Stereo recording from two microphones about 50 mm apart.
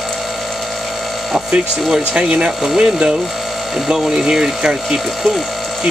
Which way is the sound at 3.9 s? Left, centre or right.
Centre.